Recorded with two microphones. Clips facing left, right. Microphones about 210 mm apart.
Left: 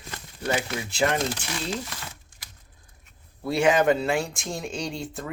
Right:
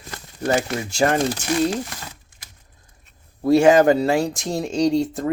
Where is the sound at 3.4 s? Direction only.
45° right (ahead or behind).